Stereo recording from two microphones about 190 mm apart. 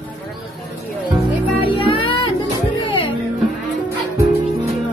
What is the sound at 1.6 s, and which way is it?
Music, 30° left (ahead or behind).